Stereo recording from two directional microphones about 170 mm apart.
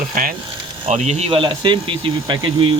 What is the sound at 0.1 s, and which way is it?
Speech, 55° right (ahead or behind).